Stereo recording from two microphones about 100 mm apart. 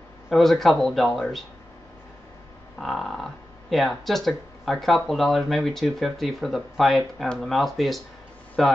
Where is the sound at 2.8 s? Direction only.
Centre (ahead or behind).